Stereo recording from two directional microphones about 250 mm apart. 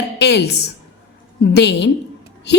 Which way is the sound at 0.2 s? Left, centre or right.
Left.